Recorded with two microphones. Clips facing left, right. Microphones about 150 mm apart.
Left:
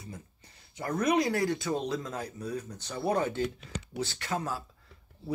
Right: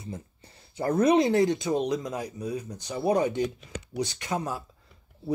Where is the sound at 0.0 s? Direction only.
30° right (ahead or behind).